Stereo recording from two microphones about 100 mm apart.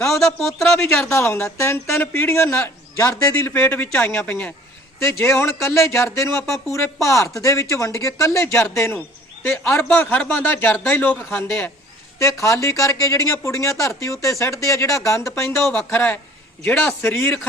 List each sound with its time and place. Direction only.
0.1 s speech: 5° left (ahead or behind)
1.1 s speech: 25° left (ahead or behind)
15.7 s a man's voice: 15° left (ahead or behind)